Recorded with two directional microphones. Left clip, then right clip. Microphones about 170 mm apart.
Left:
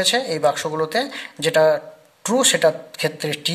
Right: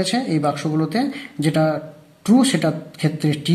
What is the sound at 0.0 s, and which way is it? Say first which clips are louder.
Speech: left 3 dB; 40° left (ahead or behind).